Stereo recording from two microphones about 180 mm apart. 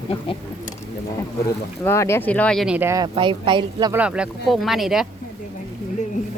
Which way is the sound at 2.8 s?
15° right (ahead or behind).